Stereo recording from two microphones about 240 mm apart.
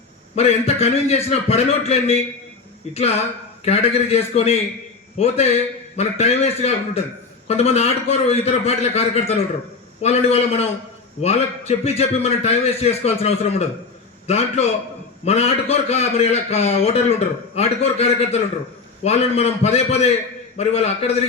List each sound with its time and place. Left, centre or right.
0.3 s a man's voice: left
3.6 s a man's voice: left